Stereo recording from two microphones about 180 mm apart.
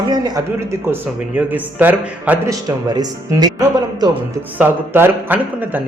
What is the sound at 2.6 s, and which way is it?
Speech, 20° right (ahead or behind).